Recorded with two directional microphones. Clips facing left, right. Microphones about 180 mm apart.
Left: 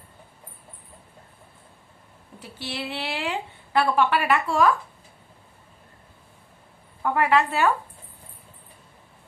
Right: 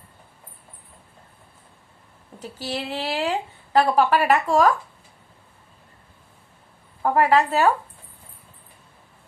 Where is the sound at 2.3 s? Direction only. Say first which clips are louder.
Right 4 dB; 40° right (ahead or behind).